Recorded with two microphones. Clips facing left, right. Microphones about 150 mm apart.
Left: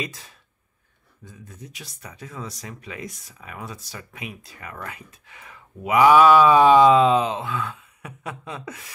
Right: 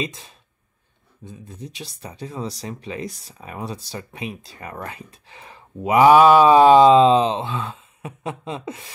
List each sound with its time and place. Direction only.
0.0 s speech: 25° right (ahead or behind)
1.5 s speech: 25° right (ahead or behind)